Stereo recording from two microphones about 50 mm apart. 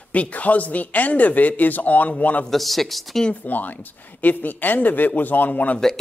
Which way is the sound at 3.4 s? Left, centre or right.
Left.